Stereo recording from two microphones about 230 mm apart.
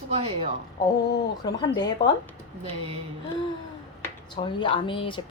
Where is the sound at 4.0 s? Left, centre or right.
Left.